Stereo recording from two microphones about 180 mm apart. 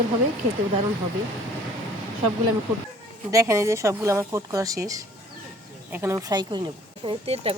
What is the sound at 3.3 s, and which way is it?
Speech, 15° right (ahead or behind).